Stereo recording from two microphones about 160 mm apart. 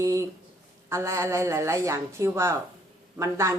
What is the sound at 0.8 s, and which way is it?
Speech, 15° right (ahead or behind).